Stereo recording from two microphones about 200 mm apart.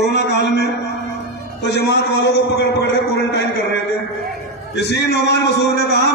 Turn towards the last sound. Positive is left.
turn(degrees=55)  # may be behind; listen again after turning